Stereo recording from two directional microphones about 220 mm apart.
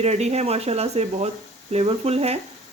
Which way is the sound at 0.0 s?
30° right (ahead or behind).